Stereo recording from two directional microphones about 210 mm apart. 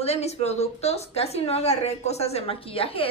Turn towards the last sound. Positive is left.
turn(degrees=25)  # may be behind; listen again after turning